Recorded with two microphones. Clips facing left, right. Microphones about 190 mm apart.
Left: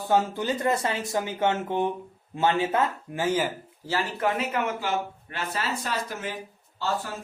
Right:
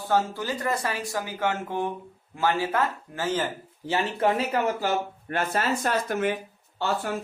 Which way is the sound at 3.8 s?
25° right (ahead or behind).